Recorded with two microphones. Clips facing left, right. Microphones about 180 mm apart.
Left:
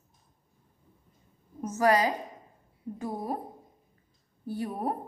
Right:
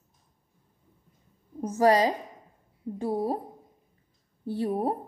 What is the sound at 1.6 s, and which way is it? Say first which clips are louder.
A woman's voice: right 3 dB; 30° right (ahead or behind).